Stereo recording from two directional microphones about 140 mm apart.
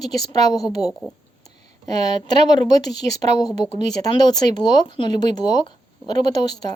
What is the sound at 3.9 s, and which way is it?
Speech, 30° left (ahead or behind).